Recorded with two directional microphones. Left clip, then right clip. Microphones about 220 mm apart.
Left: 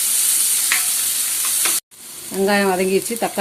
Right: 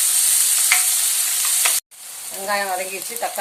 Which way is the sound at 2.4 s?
45° left (ahead or behind).